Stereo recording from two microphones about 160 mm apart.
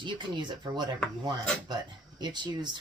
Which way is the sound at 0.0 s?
30° right (ahead or behind).